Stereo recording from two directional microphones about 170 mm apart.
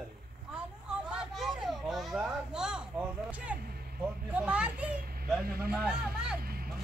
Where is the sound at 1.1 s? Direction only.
5° right (ahead or behind).